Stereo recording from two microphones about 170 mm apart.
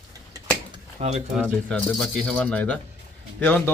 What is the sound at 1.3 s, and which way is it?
A man's voice, 5° left (ahead or behind).